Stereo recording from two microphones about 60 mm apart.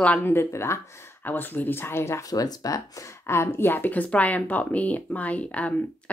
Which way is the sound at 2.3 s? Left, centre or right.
Left.